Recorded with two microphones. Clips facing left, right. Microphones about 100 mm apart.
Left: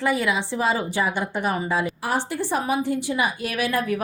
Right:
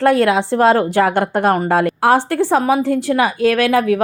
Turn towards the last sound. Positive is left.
turn(degrees=-90)